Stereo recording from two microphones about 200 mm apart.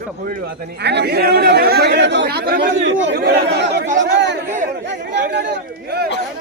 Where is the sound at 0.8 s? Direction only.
55° right (ahead or behind).